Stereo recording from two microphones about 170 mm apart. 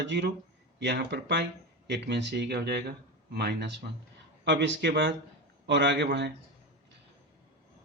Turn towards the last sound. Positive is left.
turn(degrees=-80)